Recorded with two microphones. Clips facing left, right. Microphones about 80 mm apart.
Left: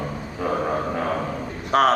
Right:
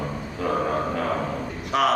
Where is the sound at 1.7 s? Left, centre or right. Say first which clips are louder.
Left 4 dB; left.